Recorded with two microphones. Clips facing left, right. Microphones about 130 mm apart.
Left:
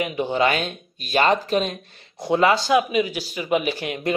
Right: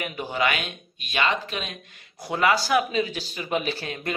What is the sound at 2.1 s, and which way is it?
Speech, 25° left (ahead or behind).